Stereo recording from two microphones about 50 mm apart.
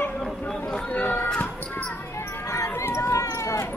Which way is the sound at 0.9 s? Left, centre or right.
Left.